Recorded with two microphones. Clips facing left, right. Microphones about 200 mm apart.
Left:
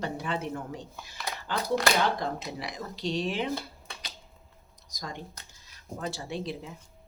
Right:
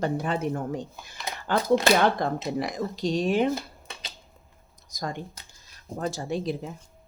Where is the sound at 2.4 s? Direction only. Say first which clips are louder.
Right 9 dB; 45° right (ahead or behind).